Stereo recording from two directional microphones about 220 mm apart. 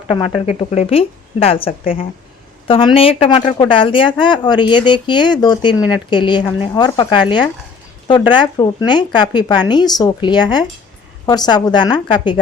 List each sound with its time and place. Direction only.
0.1 s a woman's voice: 25° left (ahead or behind)